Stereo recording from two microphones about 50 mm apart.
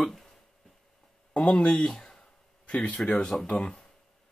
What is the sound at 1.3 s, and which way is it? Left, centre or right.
Speech, left.